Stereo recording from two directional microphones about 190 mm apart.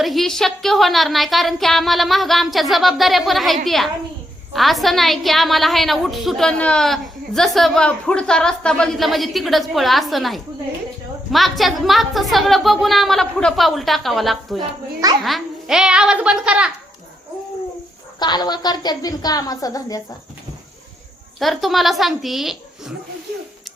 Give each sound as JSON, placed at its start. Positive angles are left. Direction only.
{"t": 0.0, "sound": "a woman's voice", "side_deg": 0}
{"t": 18.2, "sound": "a woman's voice", "side_deg": 20}
{"t": 21.3, "sound": "a woman's voice", "side_deg": 0}